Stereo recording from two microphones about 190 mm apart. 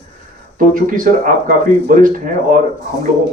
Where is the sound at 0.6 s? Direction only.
45° right (ahead or behind).